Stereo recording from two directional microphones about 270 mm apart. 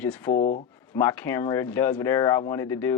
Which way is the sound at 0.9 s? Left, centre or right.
Centre.